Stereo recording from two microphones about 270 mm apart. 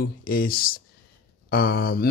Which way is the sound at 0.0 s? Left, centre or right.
Left.